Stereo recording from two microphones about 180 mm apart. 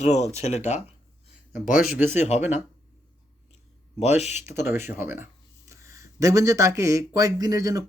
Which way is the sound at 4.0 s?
40° left (ahead or behind).